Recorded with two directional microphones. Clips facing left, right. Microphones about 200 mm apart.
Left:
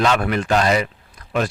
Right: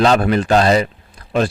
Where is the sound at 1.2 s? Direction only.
30° right (ahead or behind).